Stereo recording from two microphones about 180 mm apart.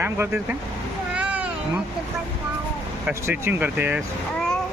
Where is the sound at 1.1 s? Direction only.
5° right (ahead or behind).